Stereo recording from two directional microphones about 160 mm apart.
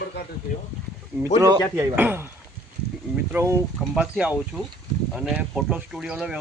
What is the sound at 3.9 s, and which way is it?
Speech, 5° right (ahead or behind).